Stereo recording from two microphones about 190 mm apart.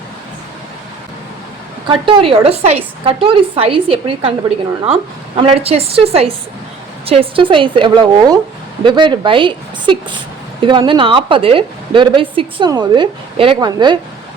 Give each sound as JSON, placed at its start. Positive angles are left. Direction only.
{"t": 1.9, "sound": "a woman's voice", "side_deg": -25}
{"t": 5.4, "sound": "a woman's voice", "side_deg": -30}